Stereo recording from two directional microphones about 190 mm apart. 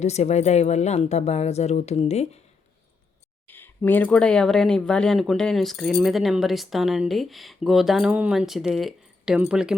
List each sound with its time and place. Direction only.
0.0 s a woman's voice: 35° left (ahead or behind)
3.4 s speech: 10° left (ahead or behind)